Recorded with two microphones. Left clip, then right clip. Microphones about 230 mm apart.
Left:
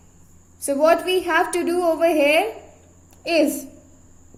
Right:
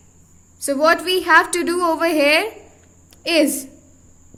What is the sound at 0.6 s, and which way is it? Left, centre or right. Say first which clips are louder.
A woman's voice: right 1 dB; right.